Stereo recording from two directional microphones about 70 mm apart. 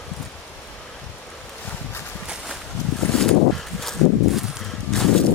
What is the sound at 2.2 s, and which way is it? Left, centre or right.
Walk, centre.